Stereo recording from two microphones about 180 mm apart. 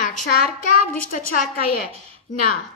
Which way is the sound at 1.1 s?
50° left (ahead or behind).